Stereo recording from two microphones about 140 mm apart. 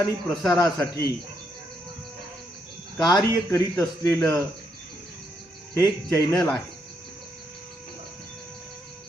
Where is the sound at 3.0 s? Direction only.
25° left (ahead or behind).